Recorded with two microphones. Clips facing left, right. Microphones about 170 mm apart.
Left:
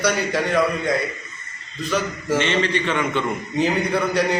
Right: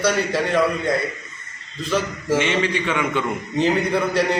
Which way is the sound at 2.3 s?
10° right (ahead or behind).